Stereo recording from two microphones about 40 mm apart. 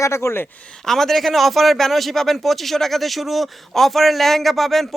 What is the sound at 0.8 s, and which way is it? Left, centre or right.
Speech, centre.